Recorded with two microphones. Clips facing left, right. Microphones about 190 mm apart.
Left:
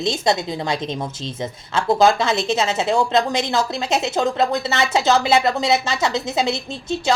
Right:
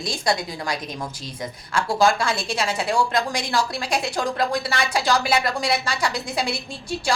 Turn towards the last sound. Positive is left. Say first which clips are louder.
# left 4 dB
turn(degrees=25)  # may be behind; listen again after turning